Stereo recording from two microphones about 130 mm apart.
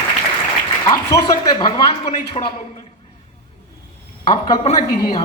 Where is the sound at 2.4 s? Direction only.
50° left (ahead or behind).